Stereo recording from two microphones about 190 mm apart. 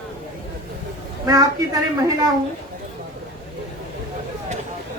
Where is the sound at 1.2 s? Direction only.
20° right (ahead or behind).